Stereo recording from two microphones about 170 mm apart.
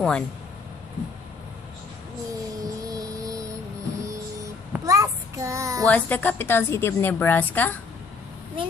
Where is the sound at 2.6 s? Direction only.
20° right (ahead or behind).